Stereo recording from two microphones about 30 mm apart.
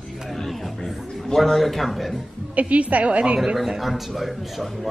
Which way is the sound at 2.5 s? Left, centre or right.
Right.